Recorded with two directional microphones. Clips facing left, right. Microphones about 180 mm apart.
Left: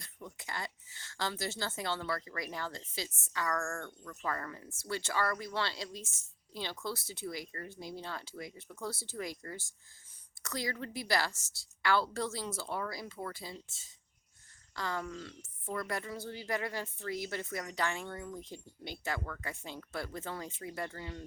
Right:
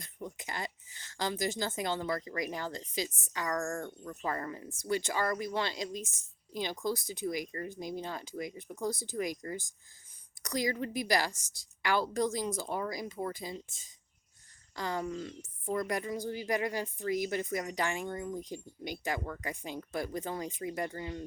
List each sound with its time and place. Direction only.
0.0 s speech: 20° right (ahead or behind)